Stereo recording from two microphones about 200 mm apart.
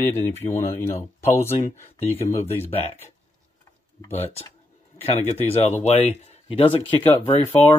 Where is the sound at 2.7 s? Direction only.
30° left (ahead or behind).